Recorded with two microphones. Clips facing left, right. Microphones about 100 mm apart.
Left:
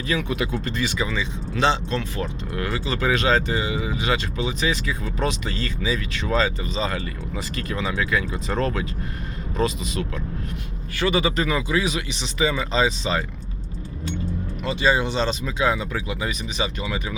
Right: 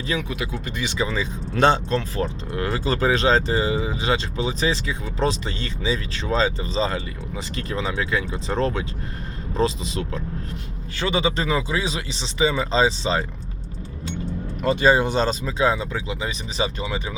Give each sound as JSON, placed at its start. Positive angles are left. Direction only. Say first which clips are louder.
{"t": 0.3, "sound": "speech", "louder": "left 4 dB", "side_deg": 0}
{"t": 0.6, "sound": "speech", "louder": "left 3 dB", "side_deg": -20}
{"t": 0.9, "sound": "speech", "louder": "right 1 dB", "side_deg": -35}
{"t": 1.5, "sound": "speech", "louder": "right 3 dB", "side_deg": -45}
{"t": 2.0, "sound": "speech", "louder": "right 2 dB", "side_deg": -30}
{"t": 14.6, "sound": "speech", "louder": "right 4 dB", "side_deg": -40}